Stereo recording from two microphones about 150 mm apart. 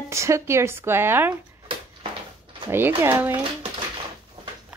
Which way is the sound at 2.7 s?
15° right (ahead or behind).